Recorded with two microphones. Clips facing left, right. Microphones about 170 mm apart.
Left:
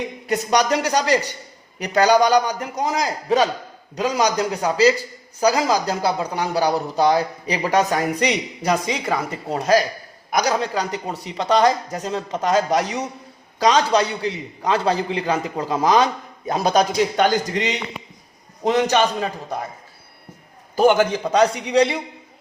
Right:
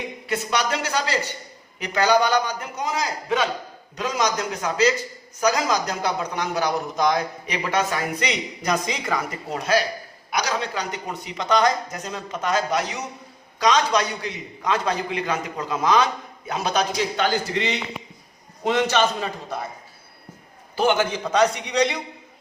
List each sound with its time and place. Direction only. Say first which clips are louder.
0.3 s a man's voice: left 6 dB; 40° left (ahead or behind)
17.2 s a man's voice: left 3 dB; 15° left (ahead or behind)
18.8 s a man's voice: left 3 dB; 15° left (ahead or behind)
20.7 s a man's voice: left 5 dB; 40° left (ahead or behind)